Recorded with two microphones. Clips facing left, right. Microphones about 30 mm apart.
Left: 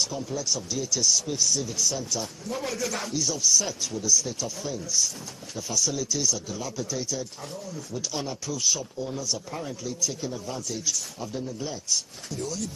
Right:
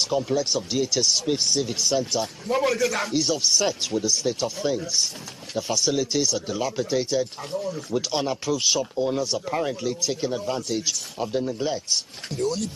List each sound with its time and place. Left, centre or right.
0.0 s speech: right